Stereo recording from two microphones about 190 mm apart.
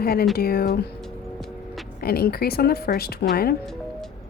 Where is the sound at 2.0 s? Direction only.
55° left (ahead or behind).